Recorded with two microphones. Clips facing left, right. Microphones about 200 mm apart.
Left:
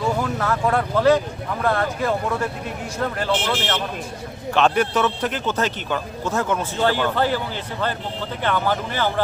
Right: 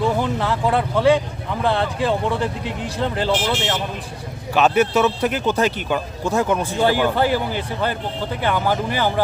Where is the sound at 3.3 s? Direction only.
10° right (ahead or behind).